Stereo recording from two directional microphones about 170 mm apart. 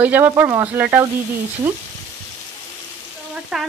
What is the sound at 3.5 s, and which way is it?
Speech, centre (ahead or behind).